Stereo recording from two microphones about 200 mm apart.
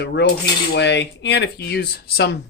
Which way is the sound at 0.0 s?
55° left (ahead or behind).